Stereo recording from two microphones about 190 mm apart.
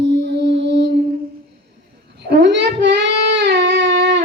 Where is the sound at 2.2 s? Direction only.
65° right (ahead or behind).